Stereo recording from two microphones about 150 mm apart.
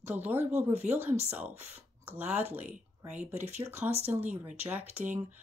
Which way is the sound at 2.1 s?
10° right (ahead or behind).